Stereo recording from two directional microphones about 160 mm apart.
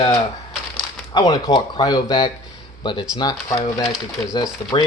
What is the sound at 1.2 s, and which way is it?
Speech, 25° left (ahead or behind).